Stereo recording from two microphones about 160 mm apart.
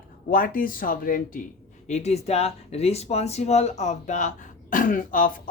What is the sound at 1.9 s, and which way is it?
Speech, 45° left (ahead or behind).